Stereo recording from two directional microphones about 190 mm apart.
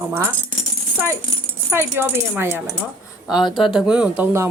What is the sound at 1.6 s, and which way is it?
Speech, 10° right (ahead or behind).